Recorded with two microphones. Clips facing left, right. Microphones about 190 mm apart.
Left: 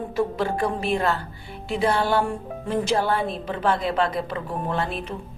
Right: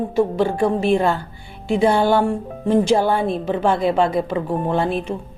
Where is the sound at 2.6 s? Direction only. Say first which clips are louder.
Right 7 dB; 25° right (ahead or behind).